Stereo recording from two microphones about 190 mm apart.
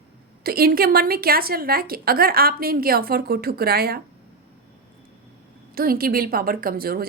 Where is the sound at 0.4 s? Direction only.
50° right (ahead or behind).